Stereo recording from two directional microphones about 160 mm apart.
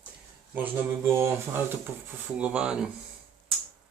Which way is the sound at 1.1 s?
15° right (ahead or behind).